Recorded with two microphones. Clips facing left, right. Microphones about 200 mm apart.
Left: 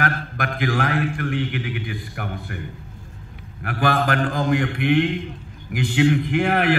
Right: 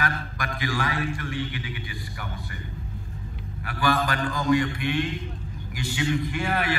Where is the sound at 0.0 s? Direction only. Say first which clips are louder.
Left 5 dB; 55° left (ahead or behind).